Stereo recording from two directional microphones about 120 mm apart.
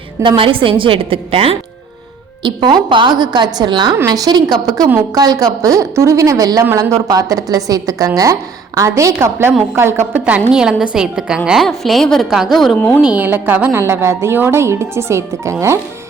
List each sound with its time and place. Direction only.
0.2 s a woman's voice: 45° right (ahead or behind)
2.4 s a woman's voice: 35° right (ahead or behind); by 12.7 s centre (ahead or behind)
12.7 s a woman's voice: 10° left (ahead or behind)
13.0 s a woman's voice: 10° right (ahead or behind)